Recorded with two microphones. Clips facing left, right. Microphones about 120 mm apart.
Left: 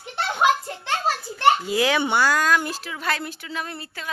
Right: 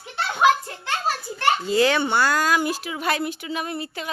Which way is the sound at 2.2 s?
5° right (ahead or behind).